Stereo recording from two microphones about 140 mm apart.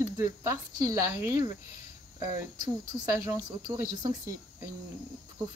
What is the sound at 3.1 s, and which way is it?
Speech, 20° right (ahead or behind).